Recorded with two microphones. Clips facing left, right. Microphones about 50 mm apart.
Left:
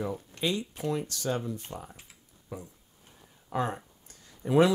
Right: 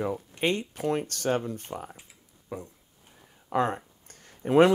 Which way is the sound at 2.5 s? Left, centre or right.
Right.